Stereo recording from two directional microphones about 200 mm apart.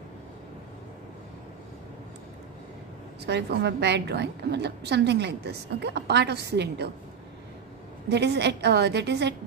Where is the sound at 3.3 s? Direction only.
55° right (ahead or behind).